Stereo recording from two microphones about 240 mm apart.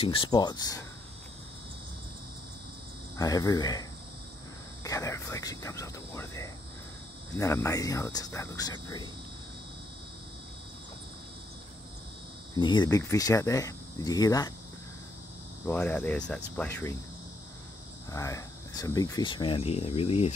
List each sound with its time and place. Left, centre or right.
0.0 s speech: left
3.2 s speech: centre
4.8 s speech: centre
12.5 s speech: centre
15.6 s speech: centre
18.1 s speech: centre